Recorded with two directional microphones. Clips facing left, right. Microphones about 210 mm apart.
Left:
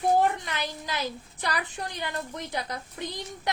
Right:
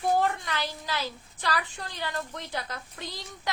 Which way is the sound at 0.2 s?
15° left (ahead or behind).